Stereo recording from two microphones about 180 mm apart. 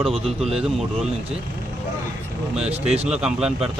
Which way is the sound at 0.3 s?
Centre (ahead or behind).